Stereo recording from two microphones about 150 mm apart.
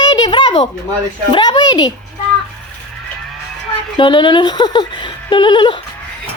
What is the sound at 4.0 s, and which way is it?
Speech, 35° left (ahead or behind).